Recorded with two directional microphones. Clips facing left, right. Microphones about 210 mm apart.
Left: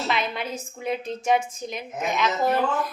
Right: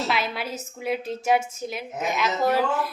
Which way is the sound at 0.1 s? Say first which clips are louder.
Even; 5° right (ahead or behind).